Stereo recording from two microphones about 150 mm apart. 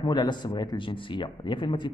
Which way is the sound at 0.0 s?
30° left (ahead or behind).